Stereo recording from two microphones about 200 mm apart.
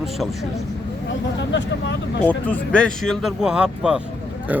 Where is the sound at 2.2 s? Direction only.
5° left (ahead or behind).